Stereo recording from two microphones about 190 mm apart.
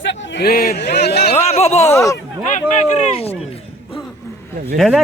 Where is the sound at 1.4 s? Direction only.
35° left (ahead or behind).